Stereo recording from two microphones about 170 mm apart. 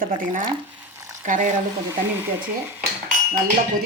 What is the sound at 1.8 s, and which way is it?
Speech, 10° right (ahead or behind).